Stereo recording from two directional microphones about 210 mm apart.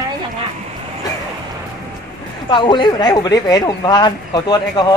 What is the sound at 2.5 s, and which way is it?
Speech, 20° left (ahead or behind).